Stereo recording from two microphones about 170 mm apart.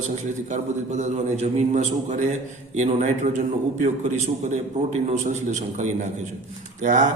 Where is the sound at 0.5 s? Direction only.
45° right (ahead or behind).